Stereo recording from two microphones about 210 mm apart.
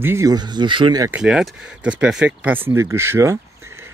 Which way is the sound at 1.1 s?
5° right (ahead or behind).